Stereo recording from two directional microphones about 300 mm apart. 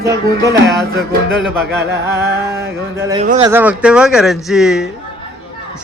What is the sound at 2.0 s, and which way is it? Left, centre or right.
A man's voice, centre.